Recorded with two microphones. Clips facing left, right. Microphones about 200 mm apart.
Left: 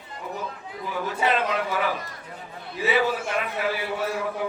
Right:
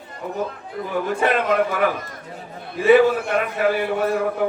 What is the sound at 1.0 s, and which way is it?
A man's voice, 55° right (ahead or behind).